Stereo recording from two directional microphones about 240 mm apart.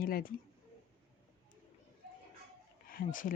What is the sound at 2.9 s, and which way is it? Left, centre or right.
Speech, left.